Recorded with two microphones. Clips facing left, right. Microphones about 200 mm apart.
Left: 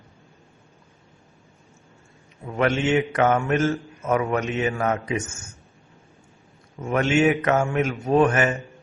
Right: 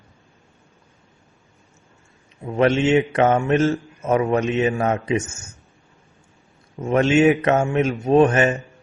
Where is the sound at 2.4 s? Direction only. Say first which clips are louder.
Right 4 dB; 25° right (ahead or behind).